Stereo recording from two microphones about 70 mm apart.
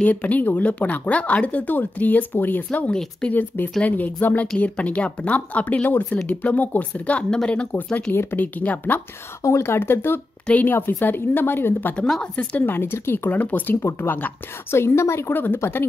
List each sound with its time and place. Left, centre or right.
0.0 s speech: left
8.1 s speech: left
9.4 s a woman's voice: left
11.9 s speech: centre
12.6 s a woman's voice: left